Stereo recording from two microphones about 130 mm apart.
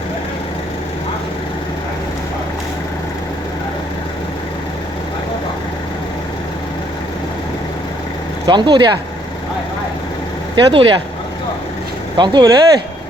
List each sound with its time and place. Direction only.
8.4 s speech: 35° right (ahead or behind)
10.5 s speech: 45° right (ahead or behind)
12.1 s speech: 35° right (ahead or behind)